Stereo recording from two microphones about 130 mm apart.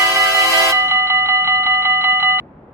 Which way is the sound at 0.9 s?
20° right (ahead or behind).